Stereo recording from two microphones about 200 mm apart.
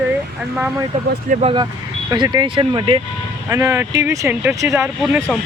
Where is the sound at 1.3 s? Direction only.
40° right (ahead or behind).